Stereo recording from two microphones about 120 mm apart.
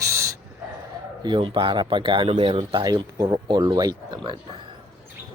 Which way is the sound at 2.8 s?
35° right (ahead or behind).